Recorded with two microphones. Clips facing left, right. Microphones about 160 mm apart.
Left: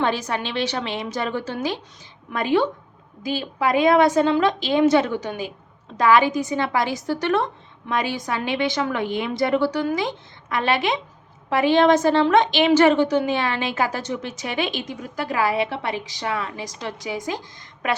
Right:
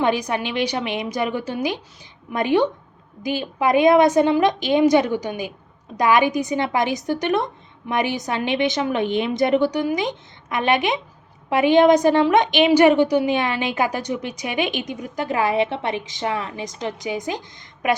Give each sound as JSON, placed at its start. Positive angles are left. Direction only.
{"t": 0.0, "sound": "a woman's voice", "side_deg": -15}